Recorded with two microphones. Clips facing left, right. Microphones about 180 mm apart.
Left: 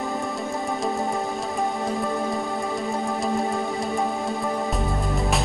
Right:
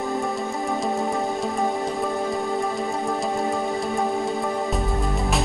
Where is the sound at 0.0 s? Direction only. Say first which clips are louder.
Right 2 dB; centre (ahead or behind).